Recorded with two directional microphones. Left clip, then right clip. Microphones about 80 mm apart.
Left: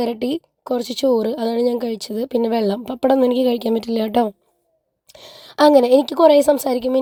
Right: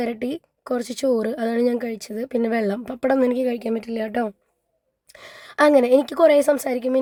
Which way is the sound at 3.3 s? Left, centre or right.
Left.